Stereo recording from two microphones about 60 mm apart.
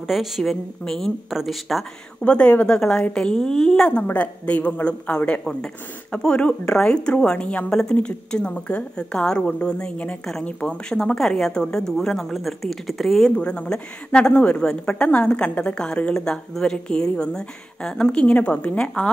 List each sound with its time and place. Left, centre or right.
0.0 s a woman's voice: centre
2.2 s speech: centre
4.1 s a woman's voice: left
5.4 s speech: centre
13.4 s a woman's voice: centre